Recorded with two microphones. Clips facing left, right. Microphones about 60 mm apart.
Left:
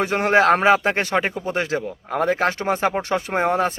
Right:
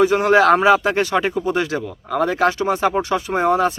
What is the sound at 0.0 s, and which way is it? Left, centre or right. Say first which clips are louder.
Speech: right 3 dB; left.